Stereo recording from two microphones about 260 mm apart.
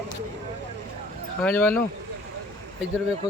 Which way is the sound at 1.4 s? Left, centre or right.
Centre.